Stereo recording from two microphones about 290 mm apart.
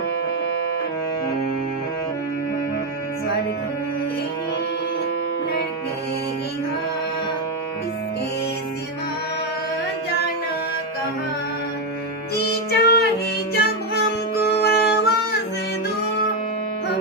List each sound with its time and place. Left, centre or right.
12.5 s music: left